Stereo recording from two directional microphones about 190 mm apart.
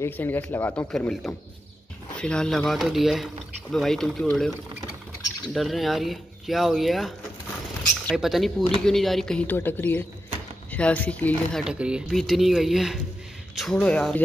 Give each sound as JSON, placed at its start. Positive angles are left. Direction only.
{"t": 0.0, "sound": "speech", "side_deg": 10}
{"t": 11.6, "sound": "speech", "side_deg": -5}